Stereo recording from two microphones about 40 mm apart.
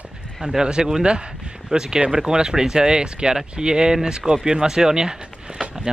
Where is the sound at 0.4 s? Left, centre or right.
Centre.